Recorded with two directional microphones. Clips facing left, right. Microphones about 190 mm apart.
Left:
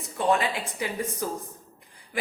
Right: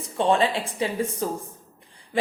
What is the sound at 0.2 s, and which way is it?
A woman's voice, 30° right (ahead or behind).